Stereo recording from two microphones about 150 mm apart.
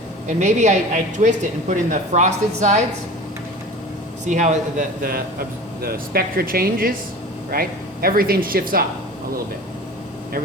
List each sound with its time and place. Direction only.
0.3 s speech: 55° right (ahead or behind)
4.3 s speech: 55° right (ahead or behind); by 8.8 s 75° right (ahead or behind)